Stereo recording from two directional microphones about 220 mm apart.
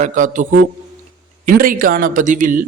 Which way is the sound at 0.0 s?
35° right (ahead or behind).